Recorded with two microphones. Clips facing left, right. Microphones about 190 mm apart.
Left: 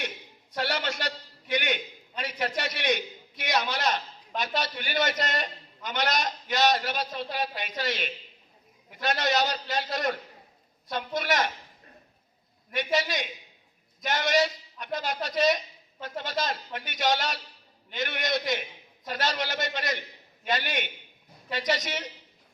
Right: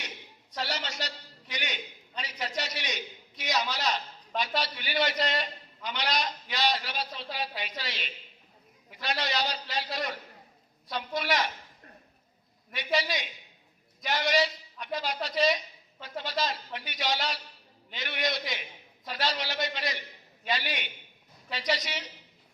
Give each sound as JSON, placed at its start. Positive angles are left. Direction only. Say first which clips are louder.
{"t": 0.5, "sound": "a sound", "louder": "left 5 dB", "side_deg": 55}
{"t": 4.4, "sound": "a man's voice", "louder": "left 1 dB", "side_deg": 50}
{"t": 13.0, "sound": "a man's voice", "louder": "left 2 dB", "side_deg": 50}